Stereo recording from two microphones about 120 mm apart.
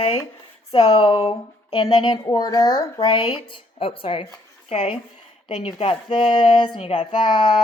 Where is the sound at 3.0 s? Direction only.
45° left (ahead or behind).